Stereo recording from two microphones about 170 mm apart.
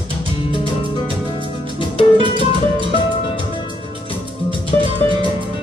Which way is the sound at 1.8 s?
30° left (ahead or behind).